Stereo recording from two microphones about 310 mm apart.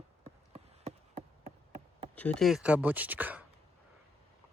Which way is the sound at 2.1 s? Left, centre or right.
Centre.